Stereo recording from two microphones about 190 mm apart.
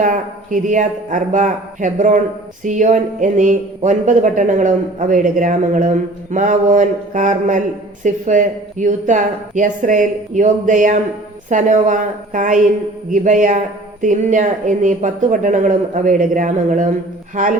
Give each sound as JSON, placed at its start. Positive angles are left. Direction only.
{"t": 0.0, "sound": "a man's voice", "side_deg": -45}